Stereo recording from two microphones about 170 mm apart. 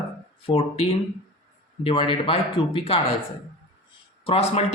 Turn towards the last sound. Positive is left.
turn(degrees=35)  # may be behind; listen again after turning